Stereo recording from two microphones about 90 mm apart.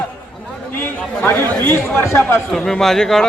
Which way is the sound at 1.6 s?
25° left (ahead or behind).